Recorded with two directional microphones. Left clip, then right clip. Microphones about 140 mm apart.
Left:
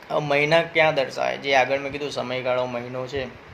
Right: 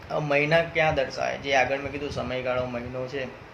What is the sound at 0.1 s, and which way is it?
A man's voice, 25° left (ahead or behind).